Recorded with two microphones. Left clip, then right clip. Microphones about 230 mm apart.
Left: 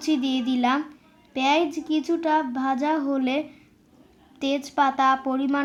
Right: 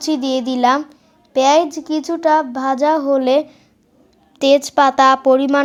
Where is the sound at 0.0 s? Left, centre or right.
Right.